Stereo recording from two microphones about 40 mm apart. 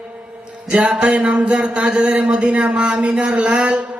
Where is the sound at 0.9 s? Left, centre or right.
Right.